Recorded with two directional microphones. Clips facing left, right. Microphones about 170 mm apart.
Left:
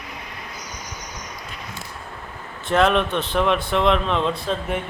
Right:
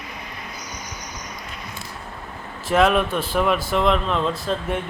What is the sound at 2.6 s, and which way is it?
Speech, 5° right (ahead or behind).